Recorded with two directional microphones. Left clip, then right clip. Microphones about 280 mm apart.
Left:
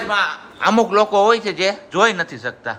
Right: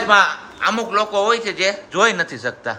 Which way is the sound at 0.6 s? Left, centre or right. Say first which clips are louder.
Left 4 dB; centre.